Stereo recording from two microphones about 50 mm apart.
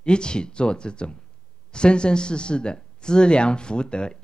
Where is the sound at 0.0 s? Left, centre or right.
Centre.